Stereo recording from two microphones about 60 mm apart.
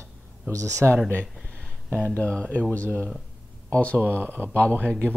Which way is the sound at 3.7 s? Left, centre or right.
Left.